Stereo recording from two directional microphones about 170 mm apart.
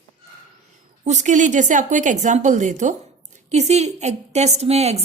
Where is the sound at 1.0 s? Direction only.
45° right (ahead or behind).